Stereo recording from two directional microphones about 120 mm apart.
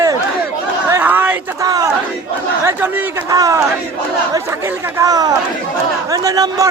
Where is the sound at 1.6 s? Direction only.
30° right (ahead or behind).